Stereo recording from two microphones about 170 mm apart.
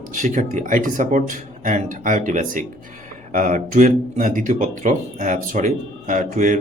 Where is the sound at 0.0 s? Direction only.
50° right (ahead or behind).